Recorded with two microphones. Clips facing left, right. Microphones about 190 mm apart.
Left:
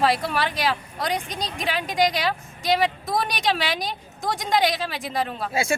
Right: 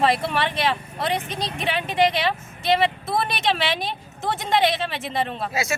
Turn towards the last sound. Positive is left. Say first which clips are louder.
# right 1 dB
turn(degrees=0)  # may be behind; listen again after turning